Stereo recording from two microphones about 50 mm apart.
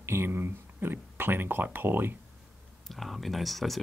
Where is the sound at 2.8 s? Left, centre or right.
Centre.